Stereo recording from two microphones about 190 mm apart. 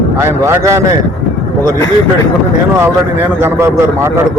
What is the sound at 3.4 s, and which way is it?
Speech, 15° right (ahead or behind).